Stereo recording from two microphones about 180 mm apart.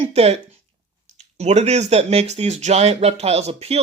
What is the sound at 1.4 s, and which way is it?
Speech, 40° right (ahead or behind).